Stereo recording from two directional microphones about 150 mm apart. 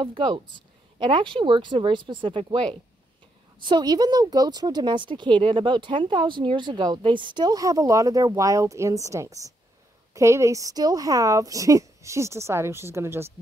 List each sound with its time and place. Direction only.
0.0 s speech: 30° right (ahead or behind); by 13.3 s 15° right (ahead or behind)